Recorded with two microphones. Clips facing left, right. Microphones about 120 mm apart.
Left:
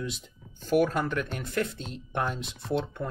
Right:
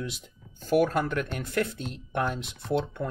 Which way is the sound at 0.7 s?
50° right (ahead or behind).